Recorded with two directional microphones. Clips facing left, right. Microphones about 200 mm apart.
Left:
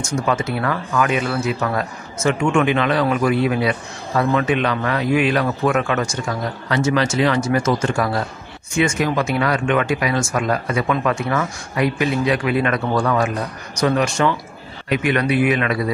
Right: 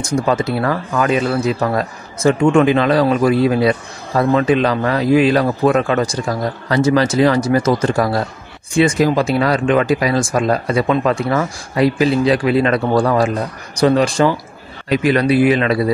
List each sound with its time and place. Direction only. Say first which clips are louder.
0.0 s speech: right 4 dB; 35° right (ahead or behind)